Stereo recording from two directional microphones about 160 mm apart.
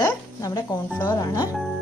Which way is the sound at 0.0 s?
20° left (ahead or behind).